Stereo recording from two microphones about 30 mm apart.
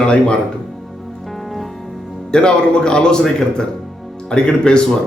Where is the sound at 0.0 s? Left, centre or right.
Left.